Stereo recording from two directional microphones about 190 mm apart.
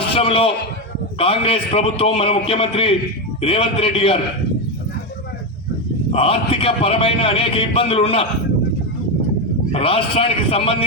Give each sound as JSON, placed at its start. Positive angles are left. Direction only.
{"t": 0.1, "sound": "a sound", "side_deg": 30}
{"t": 1.2, "sound": "a man's voice", "side_deg": 30}
{"t": 6.1, "sound": "a man's voice", "side_deg": 30}
{"t": 9.7, "sound": "a man's voice", "side_deg": 30}